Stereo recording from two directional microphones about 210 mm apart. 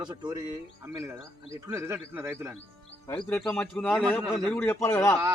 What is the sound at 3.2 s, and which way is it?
A man's voice, 5° left (ahead or behind).